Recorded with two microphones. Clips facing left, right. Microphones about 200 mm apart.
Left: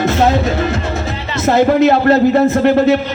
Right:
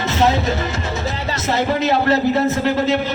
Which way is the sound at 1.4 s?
55° left (ahead or behind).